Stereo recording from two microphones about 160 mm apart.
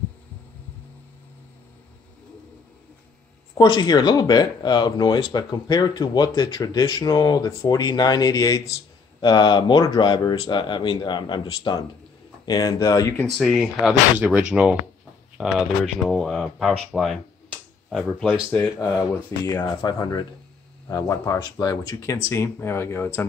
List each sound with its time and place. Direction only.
3.5 s speech: 30° left (ahead or behind)
13.4 s speech: centre (ahead or behind)
18.5 s speech: 15° left (ahead or behind)